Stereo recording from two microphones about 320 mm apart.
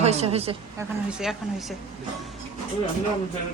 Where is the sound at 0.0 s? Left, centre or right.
Centre.